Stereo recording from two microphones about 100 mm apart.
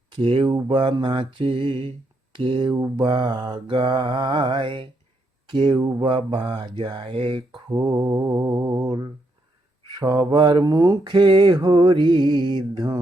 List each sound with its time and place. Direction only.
0.2 s speech: 65° right (ahead or behind)
0.4 s mantra: 50° right (ahead or behind)
2.4 s speech: 65° right (ahead or behind)
2.9 s mantra: 50° right (ahead or behind)
5.5 s speech: 55° right (ahead or behind)
7.9 s mantra: 40° right (ahead or behind)
8.9 s mantra: 50° right (ahead or behind)
10.6 s mantra: 35° right (ahead or behind)
11.1 s mantra: 50° right (ahead or behind)